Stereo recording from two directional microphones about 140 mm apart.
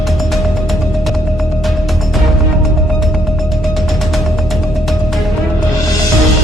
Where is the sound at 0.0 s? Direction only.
Centre (ahead or behind).